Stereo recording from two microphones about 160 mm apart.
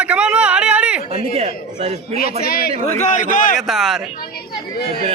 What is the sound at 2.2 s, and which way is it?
Speech, 70° left (ahead or behind).